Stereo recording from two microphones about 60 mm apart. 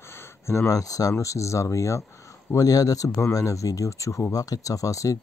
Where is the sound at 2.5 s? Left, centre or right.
Left.